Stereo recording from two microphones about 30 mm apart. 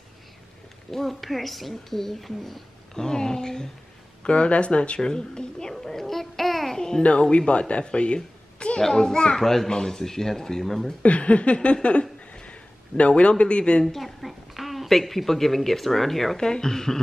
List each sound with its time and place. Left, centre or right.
0.9 s a woman's voice: centre
2.9 s speech: left
4.2 s speech: left
5.0 s speech: left
5.7 s speech: centre
6.7 s a child's voice: centre
7.0 s a man's voice: left
8.8 s speech: centre
9.7 s speech: left
11.0 s a sound: left
13.8 s a sound: centre
15.0 s speech: centre
16.3 s speech: left